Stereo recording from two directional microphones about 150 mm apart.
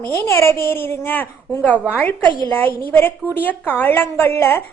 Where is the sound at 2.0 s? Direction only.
10° left (ahead or behind).